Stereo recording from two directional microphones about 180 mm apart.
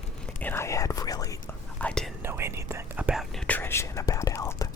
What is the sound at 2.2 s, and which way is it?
Whispering, 15° right (ahead or behind).